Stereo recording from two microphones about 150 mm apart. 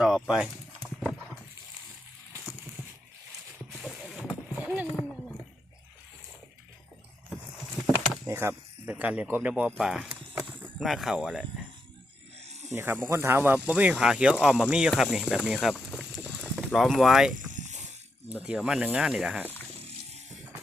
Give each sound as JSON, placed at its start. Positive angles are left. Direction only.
{"t": 0.0, "sound": "a sound", "side_deg": -5}
{"t": 3.8, "sound": "rowboat", "side_deg": -5}
{"t": 8.3, "sound": "speech", "side_deg": -15}
{"t": 12.7, "sound": "speech", "side_deg": -15}
{"t": 17.3, "sound": "a sound", "side_deg": -55}
{"t": 18.3, "sound": "speech", "side_deg": -5}